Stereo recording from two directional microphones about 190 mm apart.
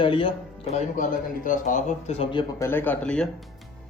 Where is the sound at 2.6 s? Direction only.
10° left (ahead or behind).